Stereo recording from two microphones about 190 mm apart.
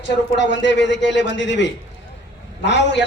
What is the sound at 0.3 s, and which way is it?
A man's voice, 70° left (ahead or behind).